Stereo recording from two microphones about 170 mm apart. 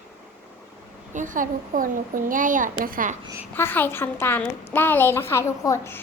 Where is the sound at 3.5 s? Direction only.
10° left (ahead or behind).